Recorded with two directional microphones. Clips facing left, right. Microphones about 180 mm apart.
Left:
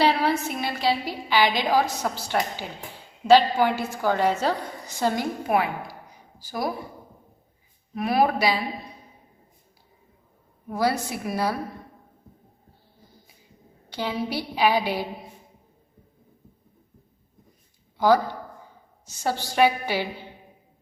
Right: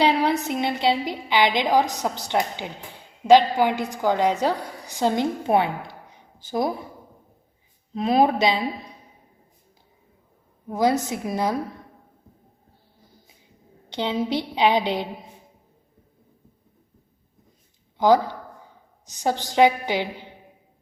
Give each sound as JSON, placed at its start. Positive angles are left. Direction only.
{"t": 0.0, "sound": "a woman's voice", "side_deg": -15}
{"t": 7.9, "sound": "a woman's voice", "side_deg": -20}
{"t": 10.7, "sound": "a woman's voice", "side_deg": -20}
{"t": 13.9, "sound": "a woman's voice", "side_deg": -20}
{"t": 17.9, "sound": "a sound", "side_deg": -20}
{"t": 19.0, "sound": "a woman's voice", "side_deg": -15}